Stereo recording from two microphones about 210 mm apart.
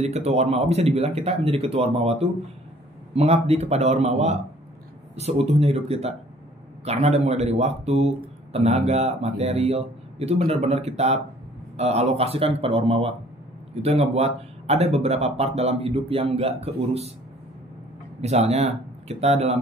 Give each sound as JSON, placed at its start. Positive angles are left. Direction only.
{"t": 0.0, "sound": "speech", "side_deg": -30}
{"t": 18.2, "sound": "speech", "side_deg": -30}